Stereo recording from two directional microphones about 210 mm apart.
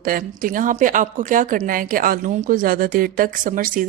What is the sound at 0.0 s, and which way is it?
A woman's voice, 40° right (ahead or behind).